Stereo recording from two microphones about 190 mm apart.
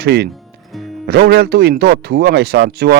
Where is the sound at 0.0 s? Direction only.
60° right (ahead or behind).